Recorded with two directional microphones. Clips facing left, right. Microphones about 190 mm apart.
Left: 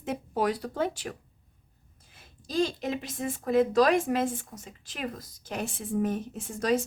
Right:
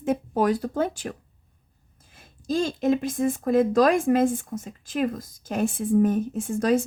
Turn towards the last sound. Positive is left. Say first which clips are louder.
# right 5 dB
turn(degrees=-50)  # may be behind; listen again after turning